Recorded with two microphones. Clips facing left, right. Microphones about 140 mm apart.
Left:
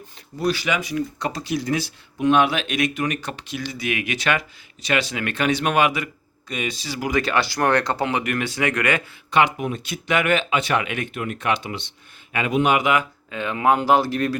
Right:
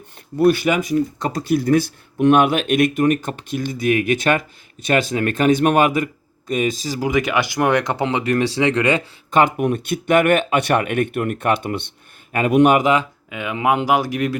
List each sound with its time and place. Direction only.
0.3 s speech: 55° right (ahead or behind)
7.1 s speech: 15° right (ahead or behind)
9.3 s speech: 45° right (ahead or behind)
12.3 s speech: 45° right (ahead or behind)
13.3 s speech: 10° right (ahead or behind)